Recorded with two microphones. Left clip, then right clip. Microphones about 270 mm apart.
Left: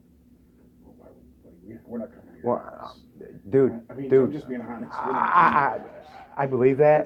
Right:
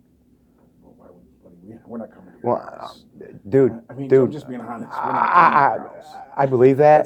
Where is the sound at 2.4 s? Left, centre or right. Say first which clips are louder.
Right 4 dB; right.